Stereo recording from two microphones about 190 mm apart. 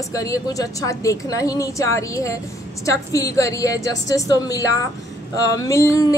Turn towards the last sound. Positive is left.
turn(degrees=15)  # may be behind; listen again after turning